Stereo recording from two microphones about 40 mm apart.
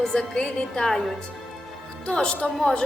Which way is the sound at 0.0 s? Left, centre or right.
Centre.